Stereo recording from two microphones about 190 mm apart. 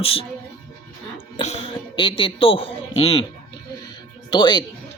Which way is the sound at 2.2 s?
30° left (ahead or behind).